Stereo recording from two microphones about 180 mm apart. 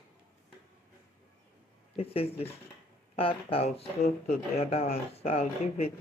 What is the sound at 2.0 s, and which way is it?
Speech, 30° left (ahead or behind).